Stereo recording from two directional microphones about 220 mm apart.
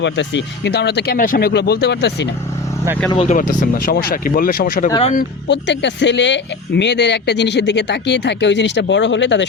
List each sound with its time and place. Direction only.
0.0 s speech: 55° left (ahead or behind)
3.2 s speech: 35° left (ahead or behind)
4.9 s speech: 25° left (ahead or behind)
5.1 s speech: 50° left (ahead or behind)